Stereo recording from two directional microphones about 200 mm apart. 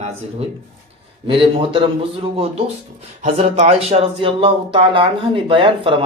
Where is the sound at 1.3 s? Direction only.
25° right (ahead or behind).